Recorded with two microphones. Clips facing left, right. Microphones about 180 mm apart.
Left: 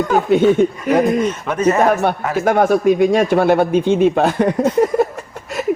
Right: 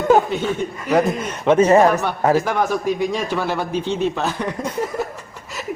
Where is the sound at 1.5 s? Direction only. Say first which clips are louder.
Right 6 dB; 30° right (ahead or behind).